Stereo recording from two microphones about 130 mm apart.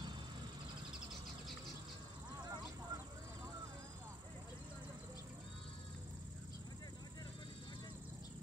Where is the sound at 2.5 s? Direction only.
25° right (ahead or behind).